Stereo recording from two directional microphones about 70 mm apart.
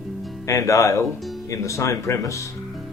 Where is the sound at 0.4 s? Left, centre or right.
Left.